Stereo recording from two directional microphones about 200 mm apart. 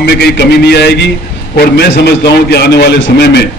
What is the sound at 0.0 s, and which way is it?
A man's voice, 55° left (ahead or behind).